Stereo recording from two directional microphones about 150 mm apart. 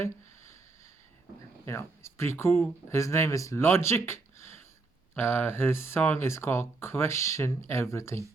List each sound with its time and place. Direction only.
1.6 s speech: 20° left (ahead or behind)